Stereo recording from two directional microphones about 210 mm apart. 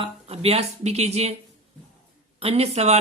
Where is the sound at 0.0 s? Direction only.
30° right (ahead or behind).